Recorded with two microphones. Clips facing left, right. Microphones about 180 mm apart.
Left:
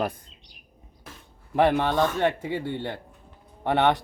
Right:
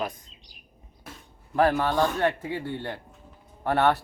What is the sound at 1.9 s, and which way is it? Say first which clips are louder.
Speech: left 1 dB; centre (ahead or behind).